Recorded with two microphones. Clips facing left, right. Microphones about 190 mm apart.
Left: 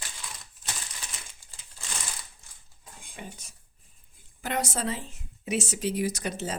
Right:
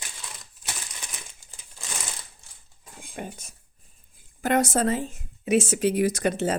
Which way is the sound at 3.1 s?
50° right (ahead or behind).